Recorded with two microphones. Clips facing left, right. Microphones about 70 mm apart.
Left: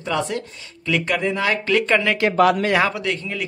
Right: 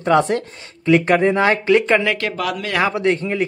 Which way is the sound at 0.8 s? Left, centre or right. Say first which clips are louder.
Right 7 dB; right.